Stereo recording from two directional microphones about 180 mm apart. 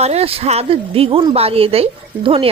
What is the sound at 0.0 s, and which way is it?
Speech, 35° right (ahead or behind).